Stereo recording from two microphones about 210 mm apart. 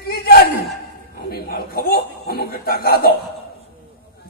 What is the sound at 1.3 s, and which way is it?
Chuckle, 50° left (ahead or behind).